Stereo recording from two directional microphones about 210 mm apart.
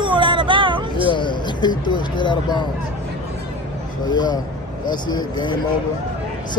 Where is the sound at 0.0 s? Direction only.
20° right (ahead or behind).